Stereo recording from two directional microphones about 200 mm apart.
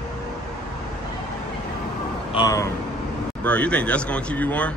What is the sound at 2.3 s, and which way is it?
Speech, 20° left (ahead or behind).